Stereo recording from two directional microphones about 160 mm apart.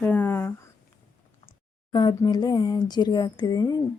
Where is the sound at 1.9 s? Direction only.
25° left (ahead or behind).